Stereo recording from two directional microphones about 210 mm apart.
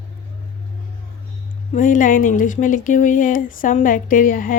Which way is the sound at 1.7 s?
40° left (ahead or behind).